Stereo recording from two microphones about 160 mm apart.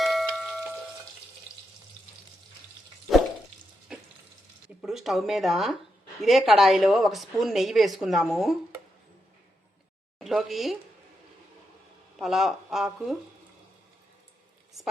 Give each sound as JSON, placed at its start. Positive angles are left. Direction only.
{"t": 0.0, "sound": "tubular bells", "side_deg": 0}
{"t": 3.9, "sound": "frying", "side_deg": -5}
{"t": 4.8, "sound": "speech", "side_deg": 0}
{"t": 10.2, "sound": "a woman's voice", "side_deg": 0}
{"t": 12.1, "sound": "speech", "side_deg": 0}